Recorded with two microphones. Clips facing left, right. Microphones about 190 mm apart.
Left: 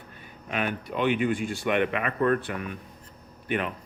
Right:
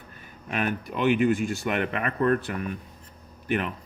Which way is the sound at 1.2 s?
45° right (ahead or behind).